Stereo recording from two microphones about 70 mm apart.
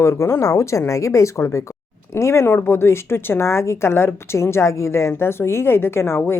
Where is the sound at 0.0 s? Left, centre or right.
Left.